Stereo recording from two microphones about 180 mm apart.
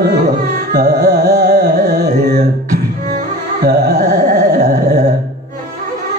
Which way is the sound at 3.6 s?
55° right (ahead or behind).